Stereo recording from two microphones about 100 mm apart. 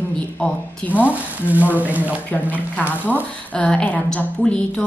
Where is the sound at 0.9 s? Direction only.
15° right (ahead or behind).